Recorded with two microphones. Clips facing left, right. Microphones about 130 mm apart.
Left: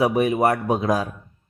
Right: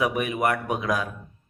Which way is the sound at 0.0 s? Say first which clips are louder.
Left 6 dB; 30° left (ahead or behind).